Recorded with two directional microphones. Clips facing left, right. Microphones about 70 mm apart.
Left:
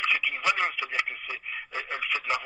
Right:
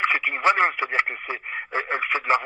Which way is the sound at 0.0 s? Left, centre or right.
Right.